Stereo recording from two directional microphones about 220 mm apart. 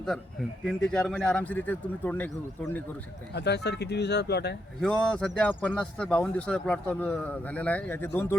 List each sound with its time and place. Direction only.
0.6 s speech: centre (ahead or behind)
3.3 s speech: 50° left (ahead or behind)
4.8 s a man's voice: 5° left (ahead or behind)